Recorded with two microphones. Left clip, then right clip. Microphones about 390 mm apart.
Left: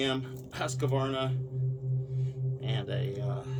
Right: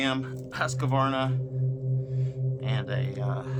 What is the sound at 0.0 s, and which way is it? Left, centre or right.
Speech, centre.